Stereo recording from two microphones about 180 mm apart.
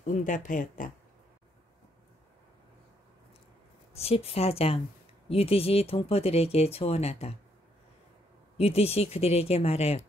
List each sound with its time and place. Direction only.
0.0 s speech: 45° left (ahead or behind)
3.9 s speech: 35° left (ahead or behind)
8.5 s speech: 35° left (ahead or behind)